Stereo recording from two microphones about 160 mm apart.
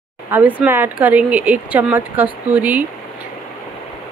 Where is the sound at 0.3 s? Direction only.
10° right (ahead or behind).